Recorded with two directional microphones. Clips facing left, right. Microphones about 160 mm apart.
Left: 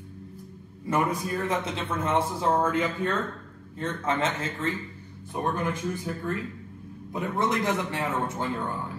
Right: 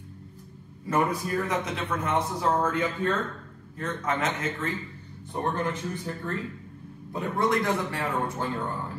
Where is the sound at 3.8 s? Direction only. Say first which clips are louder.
Left 1 dB; 30° left (ahead or behind).